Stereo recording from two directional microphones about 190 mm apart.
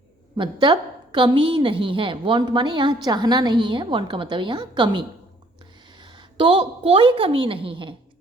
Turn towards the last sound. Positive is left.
turn(degrees=-25)  # may be behind; listen again after turning